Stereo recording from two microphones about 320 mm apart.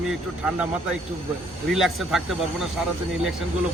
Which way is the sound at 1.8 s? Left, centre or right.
Centre.